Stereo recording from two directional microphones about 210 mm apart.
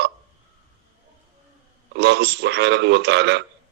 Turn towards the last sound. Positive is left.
turn(degrees=-55)  # may be behind; listen again after turning